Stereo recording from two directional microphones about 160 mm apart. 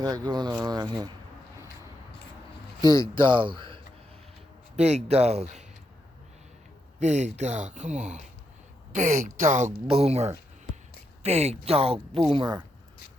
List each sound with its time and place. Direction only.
0.0 s speech: 25° right (ahead or behind)
2.8 s speech: 30° right (ahead or behind)
4.8 s speech: 45° right (ahead or behind)
7.0 s speech: 45° right (ahead or behind)
9.8 s speech: 40° right (ahead or behind)